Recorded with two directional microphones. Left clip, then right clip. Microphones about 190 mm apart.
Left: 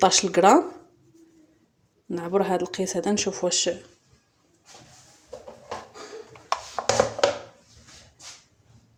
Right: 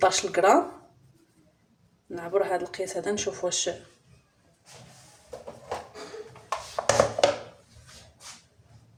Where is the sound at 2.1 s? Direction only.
40° left (ahead or behind).